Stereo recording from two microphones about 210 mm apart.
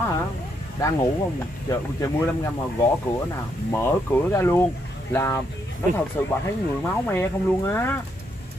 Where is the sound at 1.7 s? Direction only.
15° left (ahead or behind).